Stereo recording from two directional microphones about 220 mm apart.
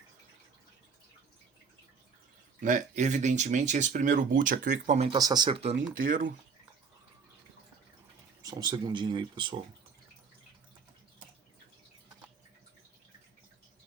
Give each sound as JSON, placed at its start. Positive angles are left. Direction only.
{"t": 2.6, "sound": "speech", "side_deg": -35}
{"t": 5.1, "sound": "speech", "side_deg": -20}
{"t": 6.0, "sound": "speech", "side_deg": -40}
{"t": 8.4, "sound": "speech", "side_deg": -15}